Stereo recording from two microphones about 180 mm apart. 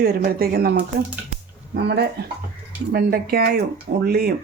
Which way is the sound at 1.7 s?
65° right (ahead or behind).